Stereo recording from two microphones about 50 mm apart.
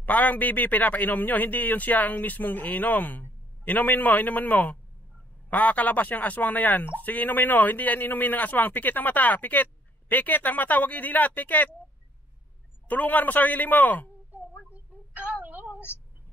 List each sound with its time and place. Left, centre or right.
0.0 s speech: left
12.8 s speech: left
15.4 s a sound: right